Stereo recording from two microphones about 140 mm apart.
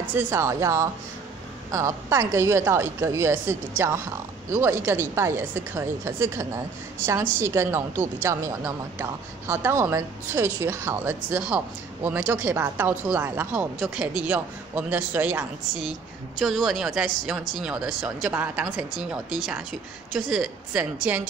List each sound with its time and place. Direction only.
0.1 s a woman's voice: 20° right (ahead or behind)
16.3 s speech: centre (ahead or behind)